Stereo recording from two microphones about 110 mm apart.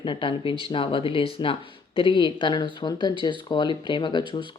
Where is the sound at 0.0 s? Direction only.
50° left (ahead or behind).